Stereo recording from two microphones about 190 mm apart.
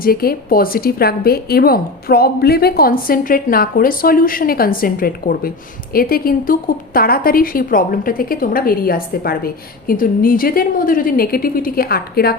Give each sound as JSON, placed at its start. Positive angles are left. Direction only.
{"t": 0.0, "sound": "a woman's voice", "side_deg": 50}